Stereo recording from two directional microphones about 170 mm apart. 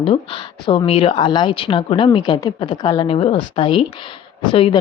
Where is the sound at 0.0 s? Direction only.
30° left (ahead or behind).